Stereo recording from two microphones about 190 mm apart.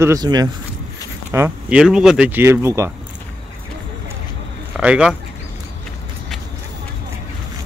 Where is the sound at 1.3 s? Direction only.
10° right (ahead or behind).